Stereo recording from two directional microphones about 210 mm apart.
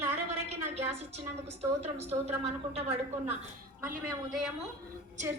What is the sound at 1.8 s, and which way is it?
Speech, 30° right (ahead or behind).